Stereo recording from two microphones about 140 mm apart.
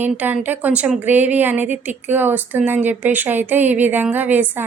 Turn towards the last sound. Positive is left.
turn(degrees=-15)  # may be behind; listen again after turning